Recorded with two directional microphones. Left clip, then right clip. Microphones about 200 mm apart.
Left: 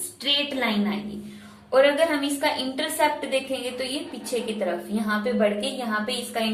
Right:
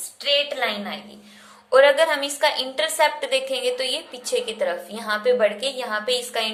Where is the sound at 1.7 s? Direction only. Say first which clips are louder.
Right 4 dB; 45° right (ahead or behind).